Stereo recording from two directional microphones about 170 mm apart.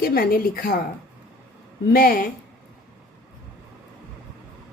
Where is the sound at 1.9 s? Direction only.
60° left (ahead or behind).